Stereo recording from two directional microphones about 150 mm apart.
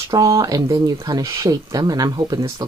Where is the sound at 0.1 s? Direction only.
25° right (ahead or behind).